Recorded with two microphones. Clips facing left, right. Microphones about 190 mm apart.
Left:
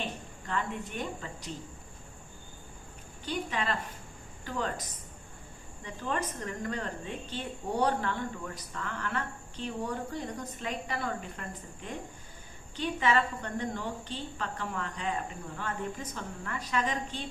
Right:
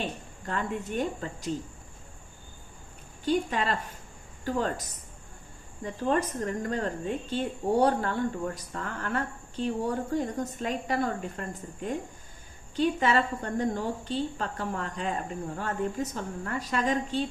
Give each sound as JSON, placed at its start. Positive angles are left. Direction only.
{"t": 0.0, "sound": "a woman's voice", "side_deg": -45}
{"t": 3.2, "sound": "a woman's voice", "side_deg": -40}